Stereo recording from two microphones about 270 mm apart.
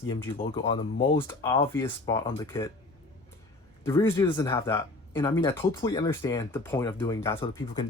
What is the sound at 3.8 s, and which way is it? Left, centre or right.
Speech, centre.